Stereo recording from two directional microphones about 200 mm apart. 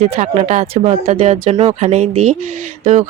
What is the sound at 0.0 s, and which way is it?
Speech, 35° right (ahead or behind).